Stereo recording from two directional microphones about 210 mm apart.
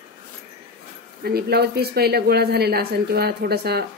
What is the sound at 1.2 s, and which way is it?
Speech, 50° right (ahead or behind).